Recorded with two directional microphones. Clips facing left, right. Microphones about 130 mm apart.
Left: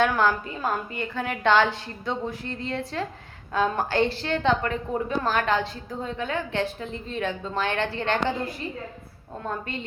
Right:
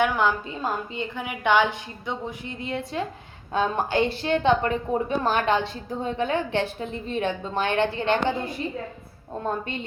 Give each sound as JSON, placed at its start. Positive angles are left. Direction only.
{"t": 0.0, "sound": "a woman's voice", "side_deg": -15}
{"t": 9.4, "sound": "a woman's voice", "side_deg": -20}